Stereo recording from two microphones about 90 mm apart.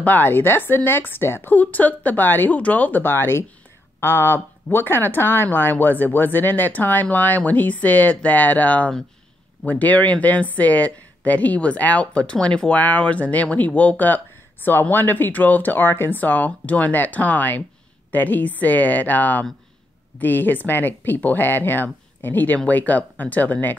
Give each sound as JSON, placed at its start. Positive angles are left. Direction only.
{"t": 0.0, "sound": "speech", "side_deg": 20}